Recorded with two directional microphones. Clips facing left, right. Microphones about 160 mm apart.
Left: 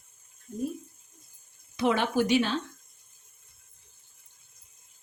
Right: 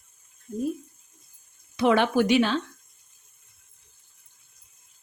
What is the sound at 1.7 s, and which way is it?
Speech, 75° right (ahead or behind).